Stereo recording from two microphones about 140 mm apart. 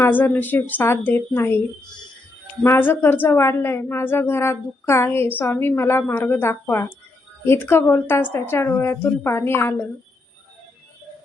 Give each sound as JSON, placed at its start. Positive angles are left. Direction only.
{"t": 0.0, "sound": "a woman's voice", "side_deg": 15}
{"t": 2.6, "sound": "a woman's voice", "side_deg": 15}